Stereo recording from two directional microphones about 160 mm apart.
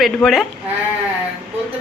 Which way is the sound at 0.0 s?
Centre (ahead or behind).